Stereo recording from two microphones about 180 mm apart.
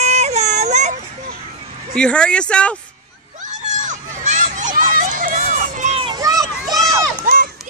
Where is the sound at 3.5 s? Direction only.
40° right (ahead or behind); by 6.8 s 20° right (ahead or behind).